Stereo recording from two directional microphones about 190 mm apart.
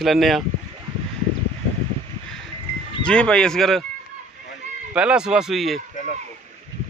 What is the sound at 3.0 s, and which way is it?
Speech, 5° left (ahead or behind).